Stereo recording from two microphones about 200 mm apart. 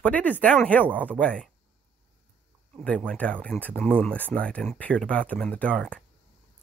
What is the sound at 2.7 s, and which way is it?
Speech, 5° left (ahead or behind).